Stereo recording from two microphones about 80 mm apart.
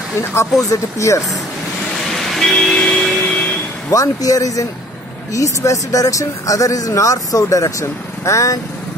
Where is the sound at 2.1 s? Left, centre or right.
Centre.